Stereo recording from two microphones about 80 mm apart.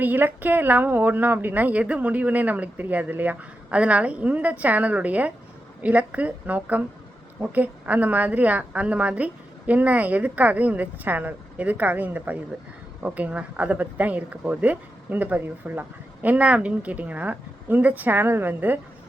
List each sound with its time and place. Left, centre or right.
0.0 s speech: right